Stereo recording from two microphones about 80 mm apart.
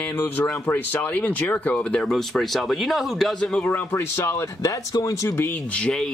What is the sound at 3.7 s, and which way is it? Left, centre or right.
Speech, left.